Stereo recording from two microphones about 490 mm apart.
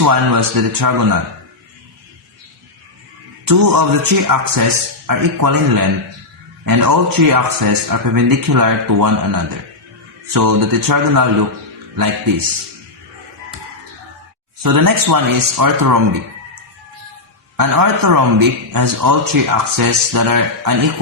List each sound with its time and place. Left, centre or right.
0.0 s a man's voice: right
3.4 s a man's voice: right
14.6 s a man's voice: right
17.6 s a man's voice: right